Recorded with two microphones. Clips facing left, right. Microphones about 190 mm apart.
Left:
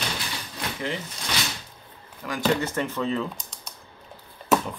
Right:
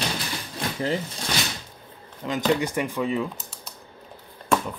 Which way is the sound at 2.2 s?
25° right (ahead or behind).